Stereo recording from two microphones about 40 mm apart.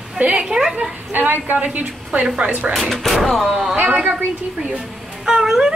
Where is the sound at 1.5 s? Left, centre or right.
Right.